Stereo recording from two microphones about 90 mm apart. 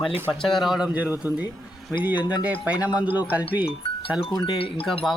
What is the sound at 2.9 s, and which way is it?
Speech, 20° right (ahead or behind).